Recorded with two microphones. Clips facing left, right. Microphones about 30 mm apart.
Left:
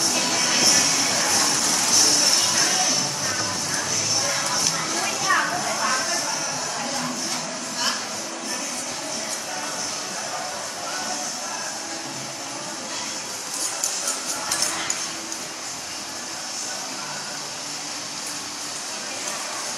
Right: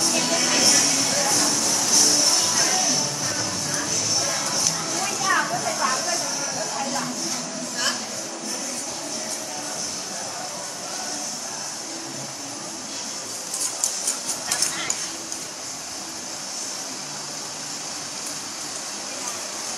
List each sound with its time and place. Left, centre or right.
0.0 s music: centre
0.8 s vehicle: centre
1.5 s music: left
5.0 s a sound: centre
6.2 s music: centre